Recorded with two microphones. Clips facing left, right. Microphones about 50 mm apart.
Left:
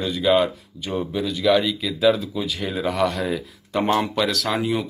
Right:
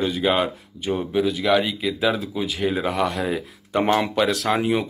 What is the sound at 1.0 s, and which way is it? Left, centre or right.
Speech, centre.